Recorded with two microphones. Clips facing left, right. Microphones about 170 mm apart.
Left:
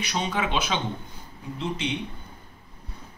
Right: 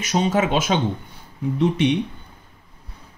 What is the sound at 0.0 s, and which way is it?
Speech, 45° right (ahead or behind).